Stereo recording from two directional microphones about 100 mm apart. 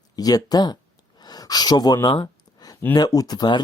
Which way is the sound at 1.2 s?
40° left (ahead or behind).